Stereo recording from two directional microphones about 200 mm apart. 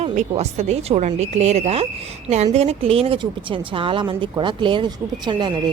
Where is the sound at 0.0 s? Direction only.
35° right (ahead or behind).